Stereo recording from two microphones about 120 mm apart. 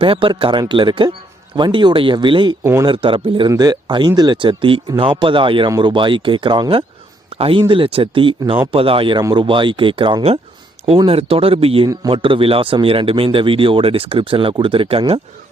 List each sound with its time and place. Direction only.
0.0 s speech: 45° right (ahead or behind)
3.5 s speech: 35° right (ahead or behind)
7.3 s a sound: 50° right (ahead or behind)
7.7 s speech: 50° right (ahead or behind)